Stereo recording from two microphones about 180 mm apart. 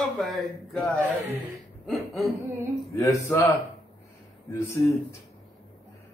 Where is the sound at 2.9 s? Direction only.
15° left (ahead or behind).